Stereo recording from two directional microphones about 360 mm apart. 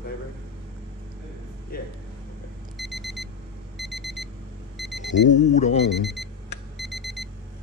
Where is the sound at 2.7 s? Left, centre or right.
Centre.